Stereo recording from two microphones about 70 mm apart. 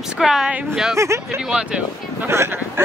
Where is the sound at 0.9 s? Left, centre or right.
Right.